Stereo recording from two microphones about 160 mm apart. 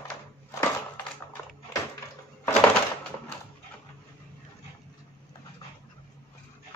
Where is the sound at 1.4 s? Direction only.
15° left (ahead or behind).